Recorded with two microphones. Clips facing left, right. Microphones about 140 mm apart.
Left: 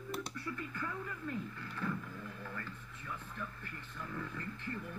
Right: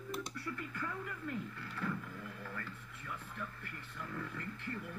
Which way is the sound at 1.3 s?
25° left (ahead or behind).